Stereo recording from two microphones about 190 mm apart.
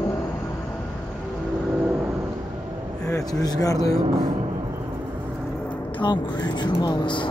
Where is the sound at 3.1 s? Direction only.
20° left (ahead or behind).